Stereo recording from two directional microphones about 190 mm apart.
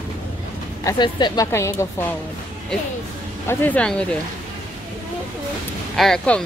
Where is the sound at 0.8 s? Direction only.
20° left (ahead or behind).